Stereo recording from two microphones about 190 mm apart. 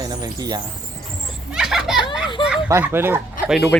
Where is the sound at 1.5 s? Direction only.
5° right (ahead or behind).